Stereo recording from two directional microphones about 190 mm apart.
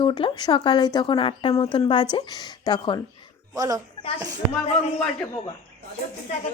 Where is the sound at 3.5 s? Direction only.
20° right (ahead or behind).